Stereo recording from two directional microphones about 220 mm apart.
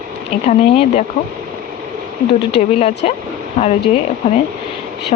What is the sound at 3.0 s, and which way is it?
Speech, 30° left (ahead or behind).